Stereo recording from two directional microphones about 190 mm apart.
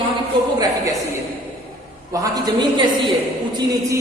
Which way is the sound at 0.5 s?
20° right (ahead or behind).